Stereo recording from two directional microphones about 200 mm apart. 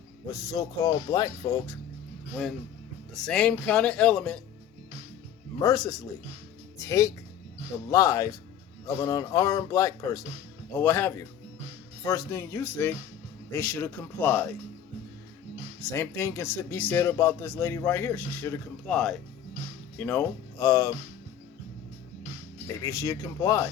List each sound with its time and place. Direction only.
0.3 s speech: 20° left (ahead or behind)
2.3 s speech: centre (ahead or behind)
5.5 s speech: 20° left (ahead or behind)
15.8 s speech: 10° left (ahead or behind)
22.6 s speech: 15° left (ahead or behind)